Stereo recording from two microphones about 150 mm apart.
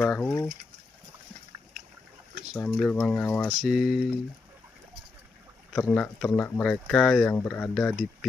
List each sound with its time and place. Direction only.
0.0 s speech: 10° left (ahead or behind)
2.6 s speech: 10° left (ahead or behind)
3.4 s speech: centre (ahead or behind)
5.8 s speech: 10° left (ahead or behind)